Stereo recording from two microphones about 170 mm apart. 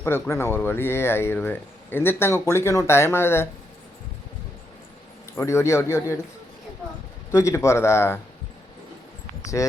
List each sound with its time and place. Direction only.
0.0 s speech: 15° left (ahead or behind)
5.4 s speech: 15° left (ahead or behind)
7.3 s speech: 20° left (ahead or behind)
9.6 s speech: 20° left (ahead or behind)